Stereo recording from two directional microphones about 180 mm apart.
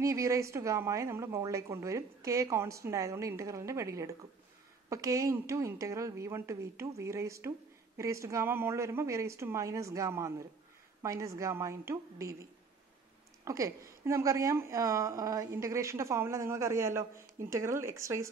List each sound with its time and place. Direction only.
0.0 s a woman's voice: 15° right (ahead or behind)